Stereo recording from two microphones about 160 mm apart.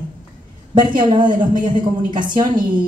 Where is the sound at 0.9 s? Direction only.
30° right (ahead or behind).